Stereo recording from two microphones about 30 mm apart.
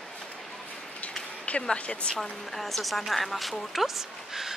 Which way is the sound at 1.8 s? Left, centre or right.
Left.